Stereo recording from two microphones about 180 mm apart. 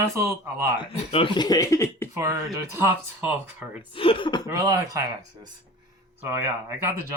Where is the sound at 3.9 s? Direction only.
30° left (ahead or behind).